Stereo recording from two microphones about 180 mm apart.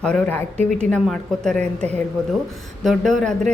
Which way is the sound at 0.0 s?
5° left (ahead or behind).